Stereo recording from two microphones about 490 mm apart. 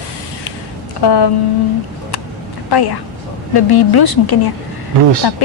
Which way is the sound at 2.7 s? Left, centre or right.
Left.